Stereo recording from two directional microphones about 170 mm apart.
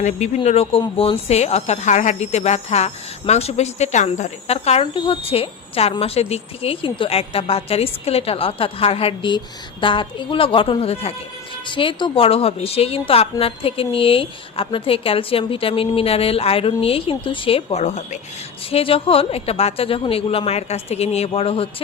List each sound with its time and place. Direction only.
0.0 s a woman's voice: 40° left (ahead or behind)
18.7 s a woman's voice: 35° left (ahead or behind)